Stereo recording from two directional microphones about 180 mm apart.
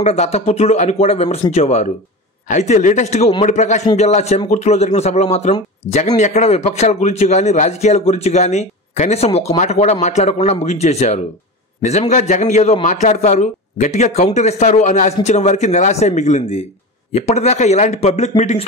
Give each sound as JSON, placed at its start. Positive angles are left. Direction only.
{"t": 0.0, "sound": "speech", "side_deg": 35}